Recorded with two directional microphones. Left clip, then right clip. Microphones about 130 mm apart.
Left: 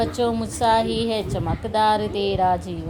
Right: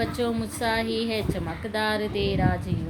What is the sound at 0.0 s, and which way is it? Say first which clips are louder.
A woman's voice: left 5 dB; 25° left (ahead or behind).